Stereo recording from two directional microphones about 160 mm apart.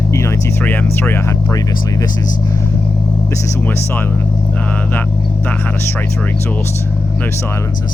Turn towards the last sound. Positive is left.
turn(degrees=10)  # may be behind; listen again after turning